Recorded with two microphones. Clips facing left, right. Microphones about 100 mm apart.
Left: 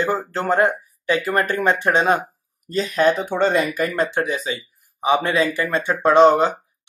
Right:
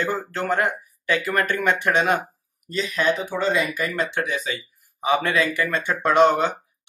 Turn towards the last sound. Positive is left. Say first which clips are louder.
# left 4 dB
turn(degrees=30)  # may be behind; listen again after turning